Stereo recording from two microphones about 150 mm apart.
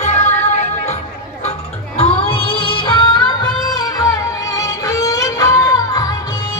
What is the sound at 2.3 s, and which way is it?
Music, 35° left (ahead or behind).